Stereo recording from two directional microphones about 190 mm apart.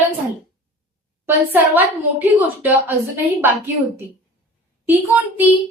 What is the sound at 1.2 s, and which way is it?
A woman's voice, 10° right (ahead or behind).